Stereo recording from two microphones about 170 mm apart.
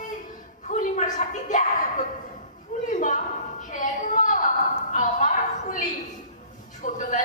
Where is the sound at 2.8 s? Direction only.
50° left (ahead or behind).